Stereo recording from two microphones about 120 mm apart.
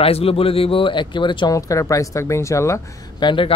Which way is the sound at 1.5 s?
30° left (ahead or behind).